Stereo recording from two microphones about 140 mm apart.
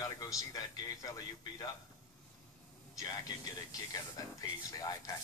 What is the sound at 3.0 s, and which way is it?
Speech, 25° left (ahead or behind).